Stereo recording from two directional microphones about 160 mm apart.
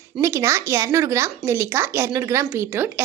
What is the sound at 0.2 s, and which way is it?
Speech, 15° right (ahead or behind).